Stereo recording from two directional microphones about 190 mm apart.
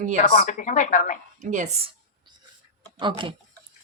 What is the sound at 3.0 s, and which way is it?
Speech, 25° right (ahead or behind).